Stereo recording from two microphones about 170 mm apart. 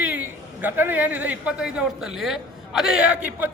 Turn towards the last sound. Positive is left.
turn(degrees=-5)  # may be behind; listen again after turning